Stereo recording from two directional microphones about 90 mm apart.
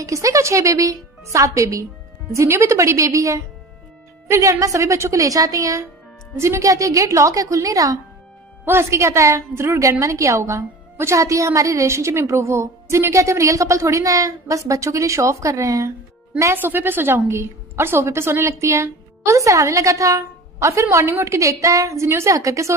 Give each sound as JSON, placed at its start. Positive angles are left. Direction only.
{"t": 0.0, "sound": "a woman's voice", "side_deg": -35}